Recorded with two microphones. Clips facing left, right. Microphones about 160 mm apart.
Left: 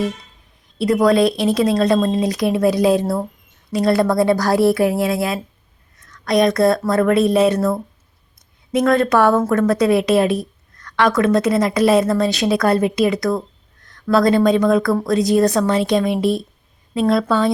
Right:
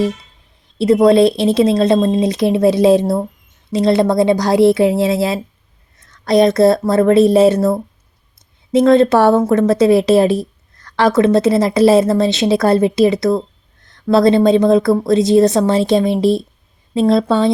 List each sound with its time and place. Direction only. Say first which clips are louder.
0.8 s a woman's voice: right 5 dB; 25° right (ahead or behind)